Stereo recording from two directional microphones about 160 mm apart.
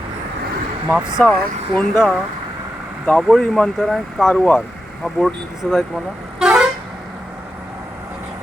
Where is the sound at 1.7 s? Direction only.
10° left (ahead or behind).